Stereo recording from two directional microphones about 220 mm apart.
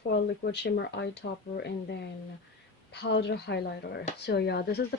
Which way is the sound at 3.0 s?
50° left (ahead or behind).